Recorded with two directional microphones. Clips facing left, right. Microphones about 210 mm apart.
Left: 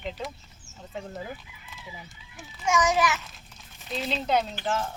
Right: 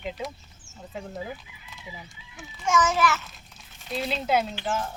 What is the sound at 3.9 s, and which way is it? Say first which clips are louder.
Speech: right 1 dB; 5° right (ahead or behind).